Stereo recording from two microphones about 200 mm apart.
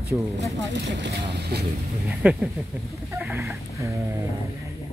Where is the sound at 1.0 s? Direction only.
55° right (ahead or behind).